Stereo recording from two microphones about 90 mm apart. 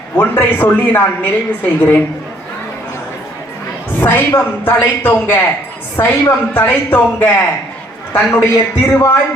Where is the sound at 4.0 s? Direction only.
20° left (ahead or behind).